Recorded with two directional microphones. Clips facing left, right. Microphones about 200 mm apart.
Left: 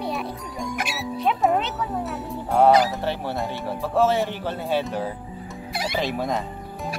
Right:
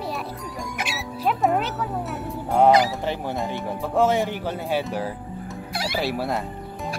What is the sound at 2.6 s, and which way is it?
Speech, 15° right (ahead or behind).